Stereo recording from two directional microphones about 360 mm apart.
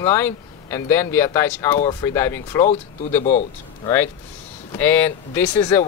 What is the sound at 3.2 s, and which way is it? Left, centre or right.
Speech, centre.